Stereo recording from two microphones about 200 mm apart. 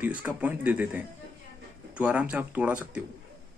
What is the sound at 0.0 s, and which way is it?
Speech, 5° right (ahead or behind).